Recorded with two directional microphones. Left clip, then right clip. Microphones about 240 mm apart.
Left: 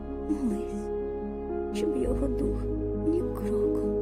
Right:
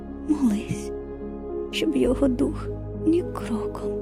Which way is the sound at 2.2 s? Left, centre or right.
Right.